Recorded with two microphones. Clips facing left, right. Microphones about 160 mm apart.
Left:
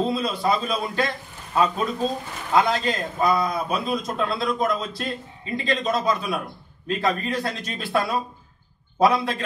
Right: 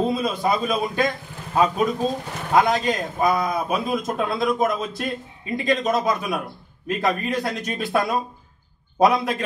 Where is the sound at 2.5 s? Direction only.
45° right (ahead or behind).